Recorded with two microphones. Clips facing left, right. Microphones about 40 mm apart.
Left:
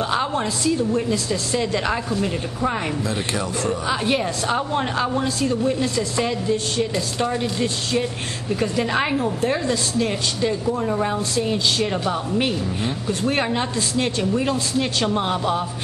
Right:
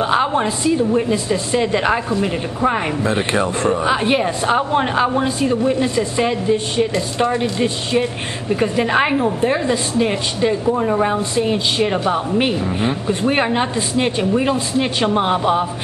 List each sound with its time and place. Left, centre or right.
0.0 s speech: right